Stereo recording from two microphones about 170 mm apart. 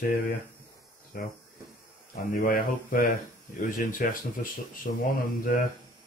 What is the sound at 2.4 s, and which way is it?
Speech, 55° left (ahead or behind).